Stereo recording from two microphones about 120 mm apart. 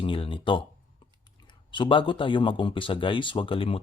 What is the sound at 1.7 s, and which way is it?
Speech, 45° left (ahead or behind).